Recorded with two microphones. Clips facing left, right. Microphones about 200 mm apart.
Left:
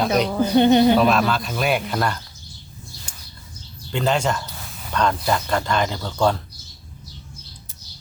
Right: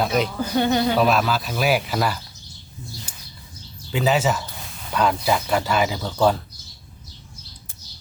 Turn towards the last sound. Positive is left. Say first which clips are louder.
# right 1 dB
turn(degrees=-5)  # may be behind; listen again after turning